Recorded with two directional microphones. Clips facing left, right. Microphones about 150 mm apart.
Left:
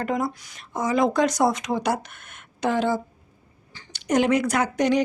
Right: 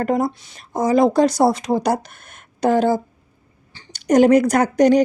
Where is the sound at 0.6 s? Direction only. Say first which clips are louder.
Right 6 dB; 35° right (ahead or behind).